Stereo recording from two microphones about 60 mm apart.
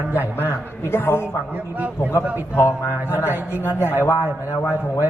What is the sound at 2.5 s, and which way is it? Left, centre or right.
Speech, left.